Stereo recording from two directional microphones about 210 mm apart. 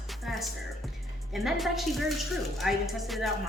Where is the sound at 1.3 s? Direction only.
Centre (ahead or behind).